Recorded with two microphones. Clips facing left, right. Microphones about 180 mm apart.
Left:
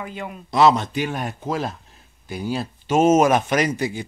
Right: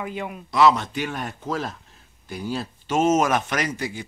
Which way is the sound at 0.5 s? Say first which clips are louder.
Left 2 dB; 25° left (ahead or behind).